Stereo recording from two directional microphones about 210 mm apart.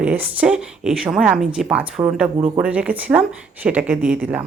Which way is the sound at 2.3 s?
20° right (ahead or behind).